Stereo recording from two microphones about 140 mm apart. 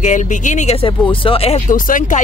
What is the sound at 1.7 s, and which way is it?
Speech, 70° left (ahead or behind).